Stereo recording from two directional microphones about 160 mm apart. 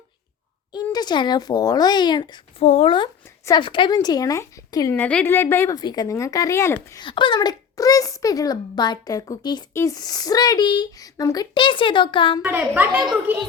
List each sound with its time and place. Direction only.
0.7 s a child's voice: 25° left (ahead or behind)
2.6 s speech: 45° left (ahead or behind)
3.2 s a sound: 20° left (ahead or behind)
3.6 s a child's voice: 30° left (ahead or behind)
4.9 s a woman's voice: 10° left (ahead or behind)
5.7 s a child's voice: 25° left (ahead or behind)
7.0 s a child's voice: 30° left (ahead or behind)
12.4 s a woman's voice: 10° right (ahead or behind)